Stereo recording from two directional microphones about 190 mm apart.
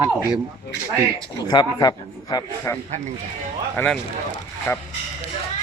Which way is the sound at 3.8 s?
10° left (ahead or behind).